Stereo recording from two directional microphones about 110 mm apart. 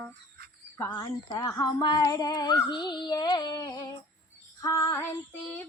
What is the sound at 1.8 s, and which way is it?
Child singing, 40° left (ahead or behind).